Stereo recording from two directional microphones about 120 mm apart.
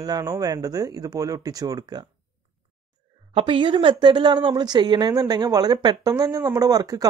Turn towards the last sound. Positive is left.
turn(degrees=-30)  # may be behind; listen again after turning